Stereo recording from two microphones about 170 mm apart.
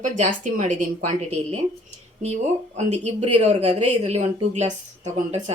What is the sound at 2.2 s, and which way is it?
A woman's voice, 40° right (ahead or behind).